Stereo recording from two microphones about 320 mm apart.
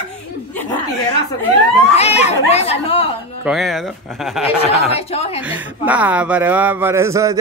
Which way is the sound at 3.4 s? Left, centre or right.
Centre.